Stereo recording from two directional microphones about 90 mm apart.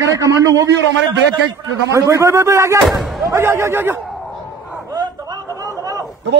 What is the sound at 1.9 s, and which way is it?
A man's voice, 35° right (ahead or behind).